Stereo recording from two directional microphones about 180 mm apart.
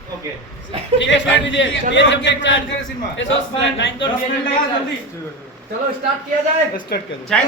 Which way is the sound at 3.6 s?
90° left.